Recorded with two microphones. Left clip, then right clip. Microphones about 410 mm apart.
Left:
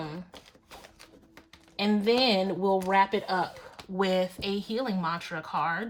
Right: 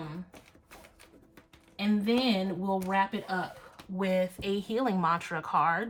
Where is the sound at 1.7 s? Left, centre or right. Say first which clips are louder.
Left 4 dB; centre.